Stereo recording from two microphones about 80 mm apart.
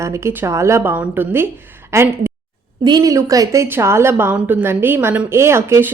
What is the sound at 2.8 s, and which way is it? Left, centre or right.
Speech, right.